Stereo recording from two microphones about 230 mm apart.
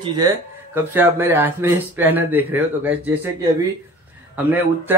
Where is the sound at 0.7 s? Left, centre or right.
Centre.